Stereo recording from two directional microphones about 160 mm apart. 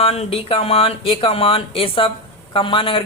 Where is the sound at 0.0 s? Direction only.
40° left (ahead or behind).